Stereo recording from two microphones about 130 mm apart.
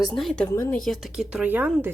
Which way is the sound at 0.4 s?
15° left (ahead or behind).